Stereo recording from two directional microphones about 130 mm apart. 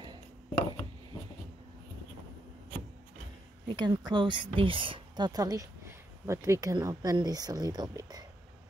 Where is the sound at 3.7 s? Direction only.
35° right (ahead or behind).